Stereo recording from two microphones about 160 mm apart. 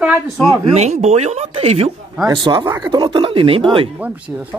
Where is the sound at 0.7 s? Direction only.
45° right (ahead or behind).